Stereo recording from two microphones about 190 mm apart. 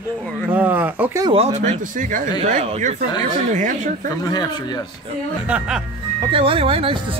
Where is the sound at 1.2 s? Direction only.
30° right (ahead or behind).